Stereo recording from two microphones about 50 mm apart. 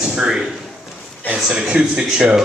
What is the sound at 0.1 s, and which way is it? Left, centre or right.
Speech, centre.